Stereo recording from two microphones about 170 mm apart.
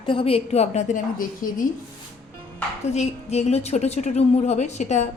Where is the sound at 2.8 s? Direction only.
40° left (ahead or behind).